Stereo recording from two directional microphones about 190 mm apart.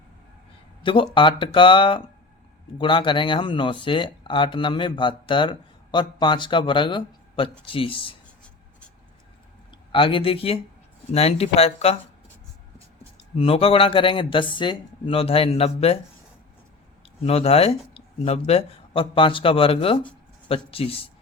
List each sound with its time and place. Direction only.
0.8 s speech: 25° left (ahead or behind)
9.9 s speech: 25° left (ahead or behind)
13.3 s speech: 30° left (ahead or behind)
17.2 s speech: 30° left (ahead or behind)